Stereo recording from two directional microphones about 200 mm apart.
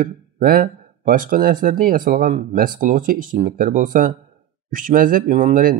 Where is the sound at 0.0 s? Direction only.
45° right (ahead or behind).